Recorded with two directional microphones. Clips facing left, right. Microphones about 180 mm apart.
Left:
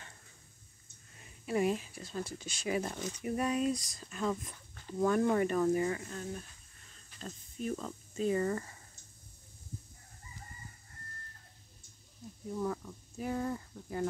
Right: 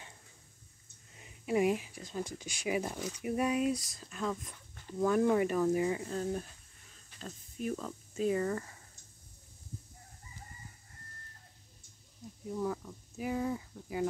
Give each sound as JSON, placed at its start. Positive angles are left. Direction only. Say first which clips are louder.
{"t": 1.1, "sound": "speech", "louder": "right 2 dB", "side_deg": -15}
{"t": 6.0, "sound": "speech", "louder": "right 6 dB", "side_deg": -30}
{"t": 7.2, "sound": "speech", "louder": "even", "side_deg": -5}
{"t": 12.5, "sound": "speech", "louder": "even", "side_deg": -5}